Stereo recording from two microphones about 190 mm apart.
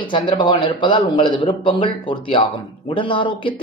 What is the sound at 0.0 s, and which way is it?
Speech, 25° left (ahead or behind).